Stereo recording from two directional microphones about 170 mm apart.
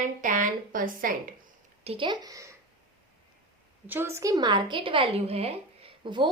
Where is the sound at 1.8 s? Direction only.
35° right (ahead or behind).